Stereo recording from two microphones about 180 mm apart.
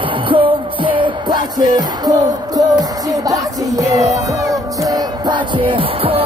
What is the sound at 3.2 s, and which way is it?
Music, 20° right (ahead or behind).